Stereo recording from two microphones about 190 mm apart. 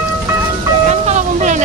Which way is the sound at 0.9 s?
35° right (ahead or behind).